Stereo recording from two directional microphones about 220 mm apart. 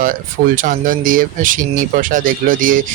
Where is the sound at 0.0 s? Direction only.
40° right (ahead or behind).